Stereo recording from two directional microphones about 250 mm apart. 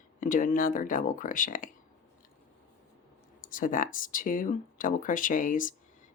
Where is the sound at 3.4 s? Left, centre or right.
Left.